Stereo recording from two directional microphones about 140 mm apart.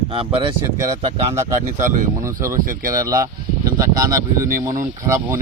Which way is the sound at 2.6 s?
85° right.